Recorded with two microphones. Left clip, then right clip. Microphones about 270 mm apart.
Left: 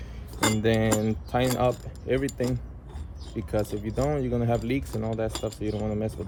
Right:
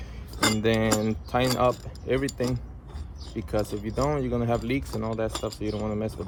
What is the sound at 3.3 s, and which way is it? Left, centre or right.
Speech, centre.